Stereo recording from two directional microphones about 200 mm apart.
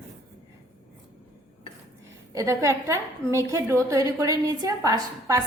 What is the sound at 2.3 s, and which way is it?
A woman's voice, 15° right (ahead or behind).